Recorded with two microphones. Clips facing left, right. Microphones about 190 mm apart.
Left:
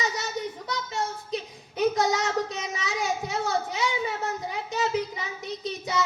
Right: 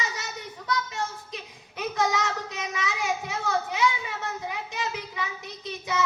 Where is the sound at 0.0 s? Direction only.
35° left (ahead or behind).